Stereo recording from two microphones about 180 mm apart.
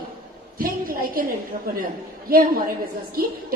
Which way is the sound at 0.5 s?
55° right (ahead or behind).